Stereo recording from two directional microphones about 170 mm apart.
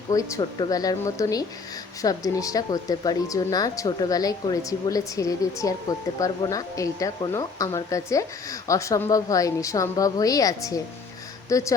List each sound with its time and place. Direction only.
0.1 s speech: 20° left (ahead or behind)